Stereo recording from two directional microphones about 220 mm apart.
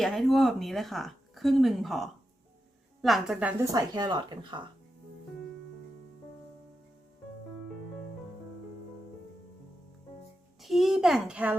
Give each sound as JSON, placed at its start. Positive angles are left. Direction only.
{"t": 0.0, "sound": "speech", "side_deg": 0}
{"t": 3.6, "sound": "speech", "side_deg": -15}
{"t": 10.6, "sound": "speech", "side_deg": 0}